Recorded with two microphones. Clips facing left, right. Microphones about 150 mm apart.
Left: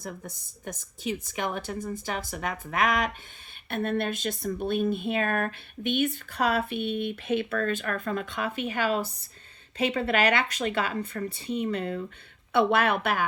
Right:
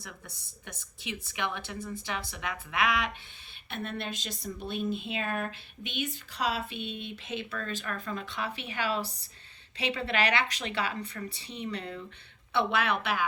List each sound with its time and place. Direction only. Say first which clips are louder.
0.0 s a woman's voice: left 9 dB; 45° left (ahead or behind)